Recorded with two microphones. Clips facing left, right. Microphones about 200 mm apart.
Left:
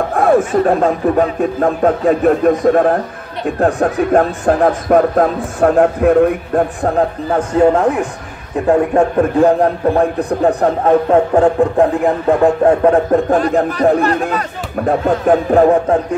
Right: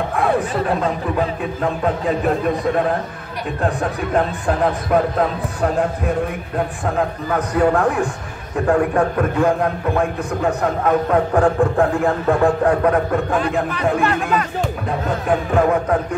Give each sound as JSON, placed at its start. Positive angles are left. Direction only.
{"t": 0.1, "sound": "speech", "side_deg": 45}
{"t": 6.8, "sound": "a man's voice", "side_deg": 35}
{"t": 9.4, "sound": "speech", "side_deg": 35}